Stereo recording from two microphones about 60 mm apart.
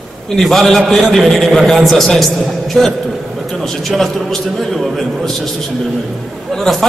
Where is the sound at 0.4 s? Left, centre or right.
Centre.